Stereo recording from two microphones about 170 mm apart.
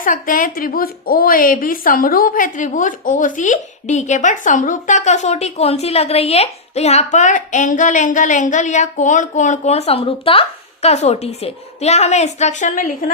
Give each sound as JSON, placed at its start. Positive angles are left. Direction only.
{"t": 0.0, "sound": "a woman's voice", "side_deg": 55}